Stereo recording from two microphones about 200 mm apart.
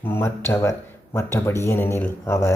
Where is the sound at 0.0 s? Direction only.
10° left (ahead or behind).